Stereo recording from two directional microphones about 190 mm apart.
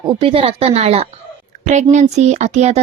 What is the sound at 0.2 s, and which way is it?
Speech, 30° right (ahead or behind).